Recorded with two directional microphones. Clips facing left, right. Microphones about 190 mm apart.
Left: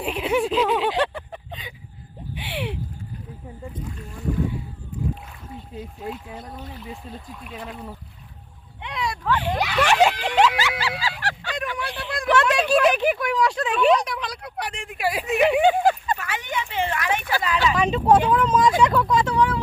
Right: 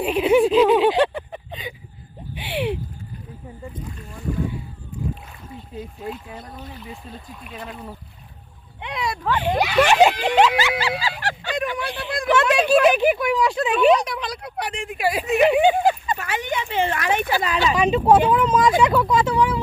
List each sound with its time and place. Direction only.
0.0 s speech: 5° right (ahead or behind)
2.4 s a sound: 10° right (ahead or behind)
6.1 s speech: 5° left (ahead or behind)
8.8 s a sound: 10° right (ahead or behind)
9.6 s speech: 15° right (ahead or behind)
10.0 s a sound: 10° right (ahead or behind)
10.2 s speech: 25° right (ahead or behind)
11.5 s speech: centre (ahead or behind)
16.1 s speech: 20° right (ahead or behind)
17.7 s speech: 5° right (ahead or behind)